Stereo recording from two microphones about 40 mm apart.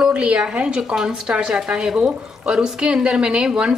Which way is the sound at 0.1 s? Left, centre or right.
Right.